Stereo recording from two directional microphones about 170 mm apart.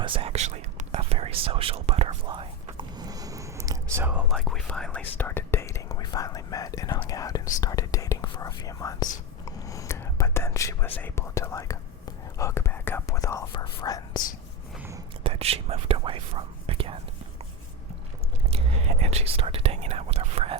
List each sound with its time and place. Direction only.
0.0 s whispering: 30° right (ahead or behind)
4.0 s speech: 5° right (ahead or behind)
4.4 s speech: 5° left (ahead or behind); by 14.2 s 20° left (ahead or behind)
15.2 s speech: 35° right (ahead or behind)
18.5 s speech: 40° right (ahead or behind)